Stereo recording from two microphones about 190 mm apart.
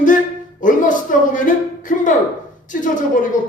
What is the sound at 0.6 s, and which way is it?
A man's voice, 45° left (ahead or behind).